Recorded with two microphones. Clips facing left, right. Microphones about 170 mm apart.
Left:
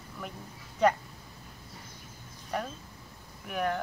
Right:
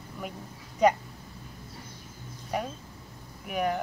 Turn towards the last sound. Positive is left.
turn(degrees=-5)  # may be behind; listen again after turning